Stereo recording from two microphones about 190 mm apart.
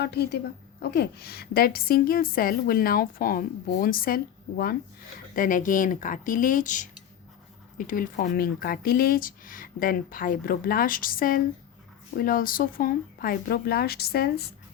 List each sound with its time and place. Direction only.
0.0 s a woman's voice: 60° left (ahead or behind)
5.3 s a woman's voice: 45° left (ahead or behind)